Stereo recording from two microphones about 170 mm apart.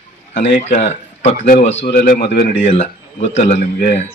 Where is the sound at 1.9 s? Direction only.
60° left (ahead or behind).